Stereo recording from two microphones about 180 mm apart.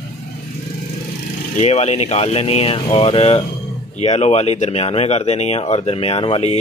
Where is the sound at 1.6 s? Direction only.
35° left (ahead or behind).